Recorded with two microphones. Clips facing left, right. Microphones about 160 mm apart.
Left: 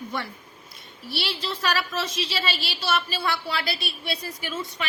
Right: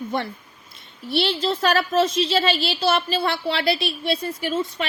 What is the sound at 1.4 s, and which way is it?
A woman's voice, 50° right (ahead or behind).